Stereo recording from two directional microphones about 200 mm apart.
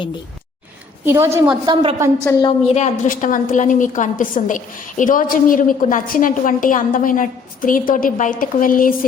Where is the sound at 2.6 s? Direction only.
35° left (ahead or behind).